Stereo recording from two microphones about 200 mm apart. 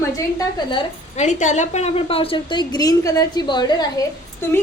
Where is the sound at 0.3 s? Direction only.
25° left (ahead or behind).